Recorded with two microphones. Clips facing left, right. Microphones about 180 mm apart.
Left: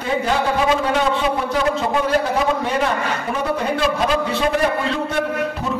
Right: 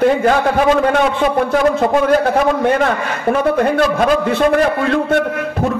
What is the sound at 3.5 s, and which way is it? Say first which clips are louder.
A man's voice: right 6 dB; 55° right (ahead or behind).